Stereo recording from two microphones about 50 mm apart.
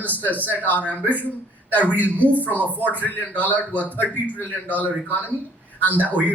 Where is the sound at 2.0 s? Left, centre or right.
Right.